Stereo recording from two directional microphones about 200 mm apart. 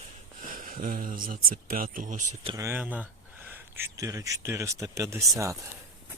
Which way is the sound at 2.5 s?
10° right (ahead or behind).